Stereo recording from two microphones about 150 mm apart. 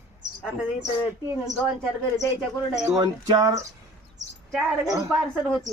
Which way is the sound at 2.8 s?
25° right (ahead or behind).